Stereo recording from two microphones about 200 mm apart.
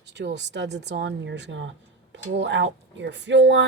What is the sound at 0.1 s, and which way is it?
Speech, 60° right (ahead or behind).